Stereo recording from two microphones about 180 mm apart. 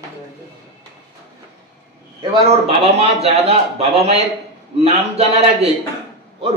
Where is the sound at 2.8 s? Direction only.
35° right (ahead or behind).